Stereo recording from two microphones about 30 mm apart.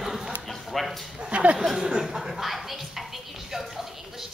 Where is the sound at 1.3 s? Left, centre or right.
Right.